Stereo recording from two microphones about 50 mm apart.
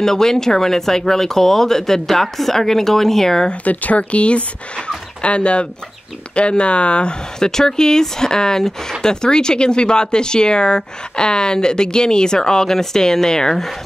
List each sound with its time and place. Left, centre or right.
0.0 s speech: centre
3.4 s speech: left; by 13.7 s centre